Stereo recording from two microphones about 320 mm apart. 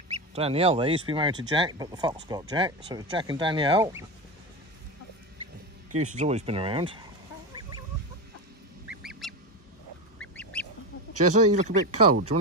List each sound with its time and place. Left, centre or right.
0.1 s speech: centre
5.9 s speech: right
8.8 s goose: centre
11.1 s speech: right
11.5 s speech: right